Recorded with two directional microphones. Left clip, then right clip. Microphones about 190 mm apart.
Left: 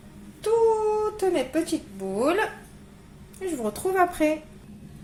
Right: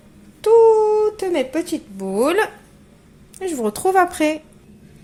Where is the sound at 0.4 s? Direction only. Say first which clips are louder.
Right 9 dB; 55° right (ahead or behind).